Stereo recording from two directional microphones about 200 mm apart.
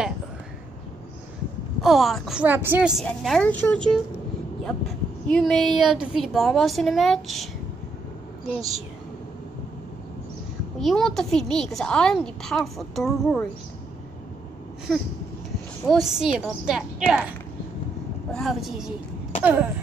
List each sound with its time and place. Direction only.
1.8 s speech: centre (ahead or behind)
10.8 s speech: centre (ahead or behind)
15.9 s speech: centre (ahead or behind)
18.3 s speech: centre (ahead or behind)
19.4 s throat clearing: 10° right (ahead or behind)